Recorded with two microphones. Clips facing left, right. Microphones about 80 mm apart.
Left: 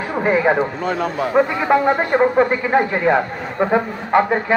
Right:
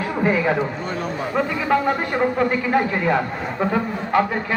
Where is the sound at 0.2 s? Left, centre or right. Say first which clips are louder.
Left 4 dB; left.